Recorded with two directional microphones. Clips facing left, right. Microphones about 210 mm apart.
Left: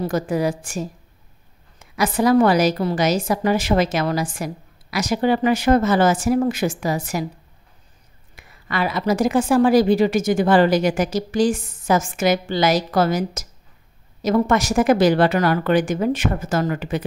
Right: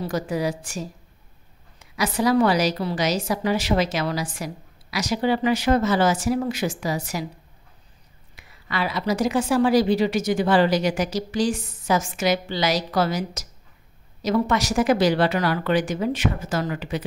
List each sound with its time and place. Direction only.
0.0 s a woman's voice: 50° left (ahead or behind)
8.4 s a woman's voice: 50° left (ahead or behind)